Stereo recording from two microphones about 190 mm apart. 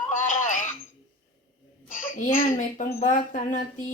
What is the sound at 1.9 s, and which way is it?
A woman's voice, 45° left (ahead or behind).